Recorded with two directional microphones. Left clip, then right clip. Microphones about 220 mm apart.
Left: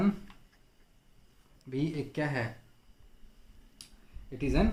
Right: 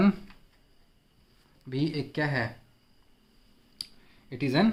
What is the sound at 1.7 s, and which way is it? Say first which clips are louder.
Speech: right 3 dB; 35° right (ahead or behind).